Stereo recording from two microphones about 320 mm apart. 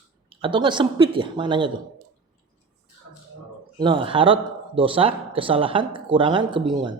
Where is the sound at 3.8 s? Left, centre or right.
Centre.